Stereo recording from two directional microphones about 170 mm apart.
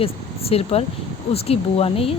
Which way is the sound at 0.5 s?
35° left (ahead or behind).